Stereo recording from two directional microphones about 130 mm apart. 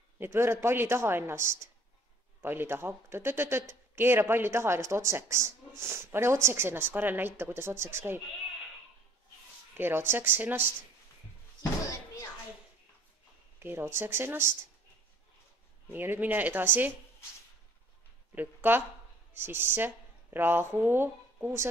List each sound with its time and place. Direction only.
0.2 s speech: 20° right (ahead or behind)
9.8 s speech: 15° right (ahead or behind)
13.6 s speech: 15° right (ahead or behind)
15.9 s speech: 15° right (ahead or behind)
18.3 s speech: 15° right (ahead or behind)